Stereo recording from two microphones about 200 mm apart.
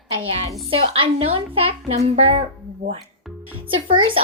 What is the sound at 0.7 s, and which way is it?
A child's voice, 25° right (ahead or behind).